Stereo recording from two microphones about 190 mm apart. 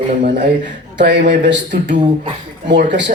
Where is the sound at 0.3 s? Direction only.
65° right (ahead or behind).